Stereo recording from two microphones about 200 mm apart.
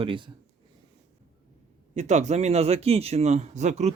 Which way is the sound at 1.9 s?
35° right (ahead or behind).